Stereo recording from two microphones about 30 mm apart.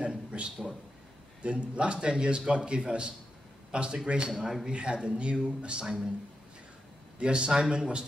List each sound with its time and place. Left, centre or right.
0.1 s a sound: right
1.4 s a man's voice: right
4.3 s a man's voice: centre
4.6 s a man's voice: right
7.2 s a man's voice: right